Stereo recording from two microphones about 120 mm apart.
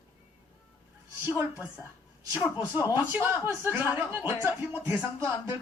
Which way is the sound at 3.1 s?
20° right (ahead or behind).